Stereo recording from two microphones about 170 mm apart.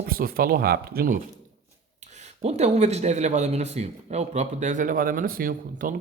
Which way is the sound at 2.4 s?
40° right (ahead or behind).